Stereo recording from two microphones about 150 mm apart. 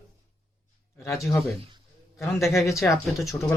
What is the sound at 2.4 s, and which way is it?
Speech, 20° left (ahead or behind).